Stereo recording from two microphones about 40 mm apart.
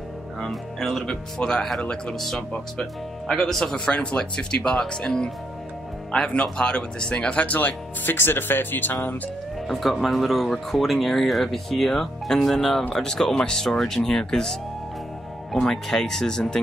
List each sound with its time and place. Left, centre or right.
0.8 s speech: centre
1.4 s speech: left
2.1 s speech: centre
3.9 s speech: left
6.4 s speech: left
7.5 s speech: left
9.7 s speech: centre